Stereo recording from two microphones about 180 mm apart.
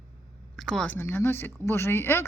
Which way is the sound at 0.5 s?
5° left (ahead or behind).